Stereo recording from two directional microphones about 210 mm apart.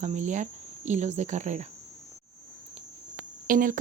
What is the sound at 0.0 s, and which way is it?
Speech, 35° right (ahead or behind).